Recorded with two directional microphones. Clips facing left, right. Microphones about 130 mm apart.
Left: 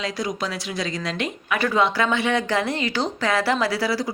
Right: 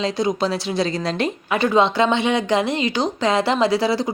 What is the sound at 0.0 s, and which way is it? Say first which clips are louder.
A woman's voice: right 6 dB; 25° right (ahead or behind).